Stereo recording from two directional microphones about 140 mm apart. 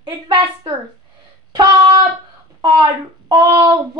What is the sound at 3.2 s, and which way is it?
Child singing, 30° right (ahead or behind).